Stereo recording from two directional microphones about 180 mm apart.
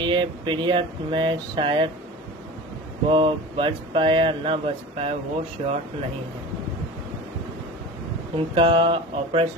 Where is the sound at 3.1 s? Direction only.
30° right (ahead or behind).